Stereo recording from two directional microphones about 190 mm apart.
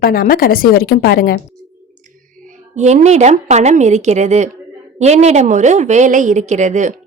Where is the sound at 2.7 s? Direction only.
35° right (ahead or behind).